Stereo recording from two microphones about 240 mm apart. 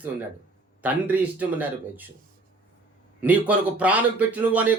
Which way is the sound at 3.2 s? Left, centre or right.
Centre.